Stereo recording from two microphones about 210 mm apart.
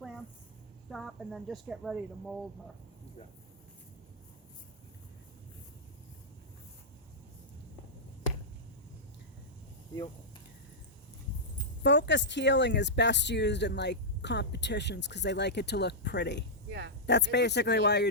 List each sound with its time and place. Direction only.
0.9 s speech: centre (ahead or behind)
11.8 s speech: 55° left (ahead or behind)